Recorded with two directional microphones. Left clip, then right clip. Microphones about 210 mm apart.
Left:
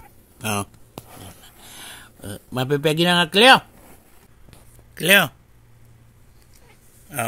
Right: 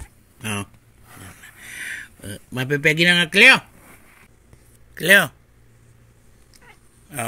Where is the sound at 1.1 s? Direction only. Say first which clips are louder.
Right 2 dB; centre (ahead or behind).